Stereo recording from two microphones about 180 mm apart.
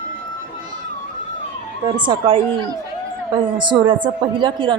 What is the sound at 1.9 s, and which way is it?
Speech, 25° right (ahead or behind).